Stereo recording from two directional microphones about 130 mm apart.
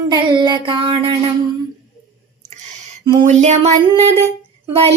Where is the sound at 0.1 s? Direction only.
35° right (ahead or behind).